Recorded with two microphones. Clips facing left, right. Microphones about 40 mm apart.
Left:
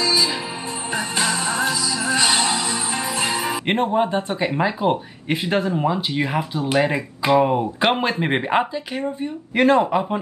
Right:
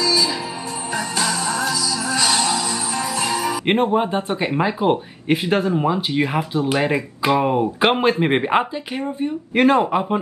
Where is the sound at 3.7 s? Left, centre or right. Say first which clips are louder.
Right 1 dB; centre.